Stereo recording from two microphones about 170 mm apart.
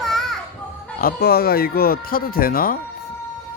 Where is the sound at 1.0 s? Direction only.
65° left (ahead or behind).